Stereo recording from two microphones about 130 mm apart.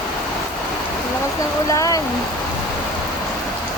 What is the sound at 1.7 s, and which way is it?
Speech, 25° left (ahead or behind).